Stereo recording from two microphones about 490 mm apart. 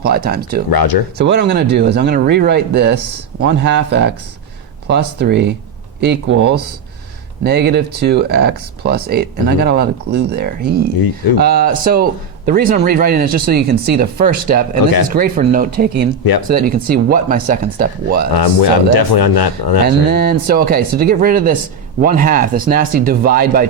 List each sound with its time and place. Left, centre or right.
0.0 s speech: centre
0.7 s speech: left
1.2 s speech: right
18.3 s speech: left
20.1 s speech: centre